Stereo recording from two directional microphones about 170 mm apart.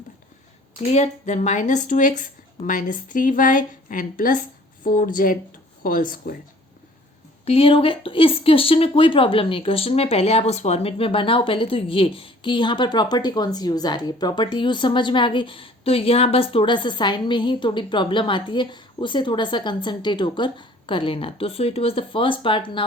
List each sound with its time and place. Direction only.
0.8 s a woman's voice: 40° left (ahead or behind); by 6.3 s 55° left (ahead or behind)
7.4 s speech: 35° left (ahead or behind)